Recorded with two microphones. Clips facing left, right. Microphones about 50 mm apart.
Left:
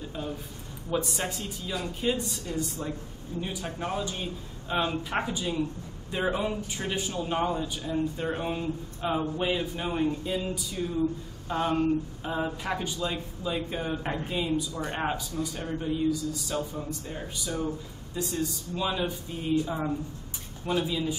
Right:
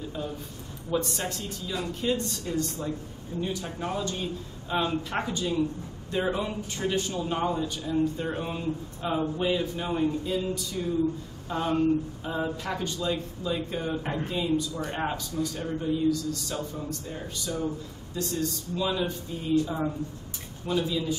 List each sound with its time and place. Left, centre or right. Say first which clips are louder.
0.8 s speech: right 1 dB; centre
18.1 s speech: right 1 dB; centre